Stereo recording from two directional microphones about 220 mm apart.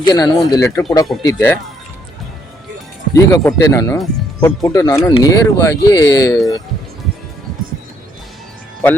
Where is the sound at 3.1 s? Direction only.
15° left (ahead or behind).